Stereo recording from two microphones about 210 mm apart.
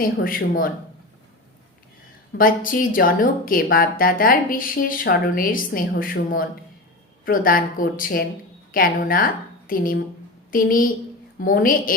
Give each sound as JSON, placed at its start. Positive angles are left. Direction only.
{"t": 0.0, "sound": "a woman's voice", "side_deg": 40}
{"t": 2.4, "sound": "a woman's voice", "side_deg": 40}